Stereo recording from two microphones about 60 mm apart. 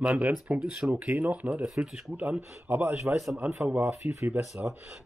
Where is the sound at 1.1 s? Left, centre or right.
Right.